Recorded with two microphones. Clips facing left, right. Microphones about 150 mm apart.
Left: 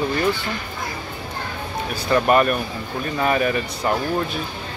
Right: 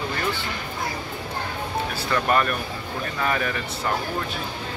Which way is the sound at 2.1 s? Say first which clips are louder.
Left 6 dB; 20° left (ahead or behind).